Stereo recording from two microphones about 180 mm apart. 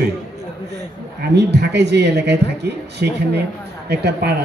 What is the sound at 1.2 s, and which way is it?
Speech, 70° right (ahead or behind).